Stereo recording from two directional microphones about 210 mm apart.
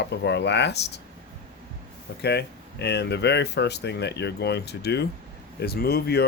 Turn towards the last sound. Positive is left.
turn(degrees=50)  # may be behind; listen again after turning